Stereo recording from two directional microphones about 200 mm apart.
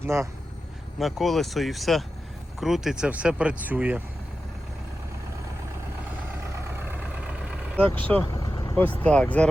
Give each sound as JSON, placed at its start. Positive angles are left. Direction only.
{"t": 0.0, "sound": "speech", "side_deg": -15}
{"t": 0.9, "sound": "speech", "side_deg": 0}
{"t": 6.7, "sound": "vehicle", "side_deg": -10}
{"t": 7.9, "sound": "speech", "side_deg": 10}
{"t": 8.2, "sound": "vehicle", "side_deg": 20}
{"t": 9.0, "sound": "speech", "side_deg": 5}